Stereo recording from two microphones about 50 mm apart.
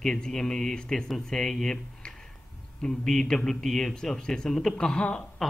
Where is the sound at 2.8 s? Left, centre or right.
Centre.